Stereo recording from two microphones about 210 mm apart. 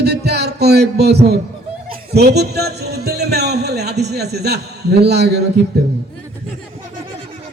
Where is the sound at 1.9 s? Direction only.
50° right (ahead or behind).